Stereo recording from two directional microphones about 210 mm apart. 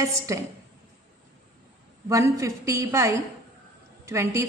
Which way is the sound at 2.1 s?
15° right (ahead or behind).